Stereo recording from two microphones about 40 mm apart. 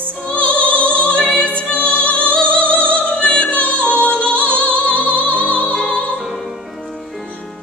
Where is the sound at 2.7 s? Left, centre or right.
Right.